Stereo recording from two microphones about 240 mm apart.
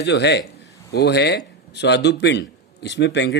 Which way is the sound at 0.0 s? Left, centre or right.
Left.